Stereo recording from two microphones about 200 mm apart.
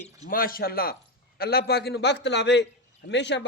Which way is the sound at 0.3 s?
45° left (ahead or behind).